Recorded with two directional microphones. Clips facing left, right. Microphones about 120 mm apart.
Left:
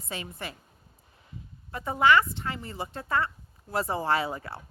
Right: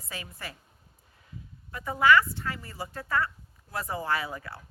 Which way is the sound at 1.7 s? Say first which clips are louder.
Even; 25° left (ahead or behind).